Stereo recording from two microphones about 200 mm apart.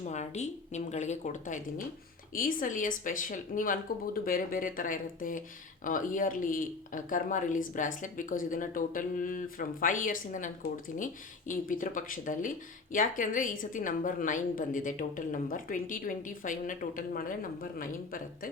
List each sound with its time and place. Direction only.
0.0 s speech: 35° left (ahead or behind)